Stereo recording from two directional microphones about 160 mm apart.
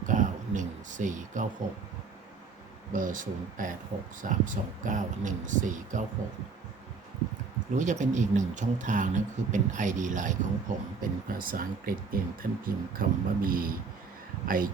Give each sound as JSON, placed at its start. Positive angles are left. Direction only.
{"t": 0.0, "sound": "a sound", "side_deg": -55}
{"t": 2.9, "sound": "speech", "side_deg": -55}
{"t": 7.8, "sound": "speech", "side_deg": -50}